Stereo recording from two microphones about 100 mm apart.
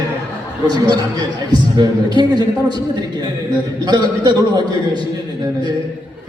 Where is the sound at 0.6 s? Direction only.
45° right (ahead or behind).